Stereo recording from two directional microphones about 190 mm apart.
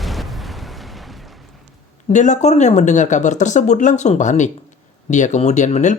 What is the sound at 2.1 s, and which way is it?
Speech, 40° left (ahead or behind).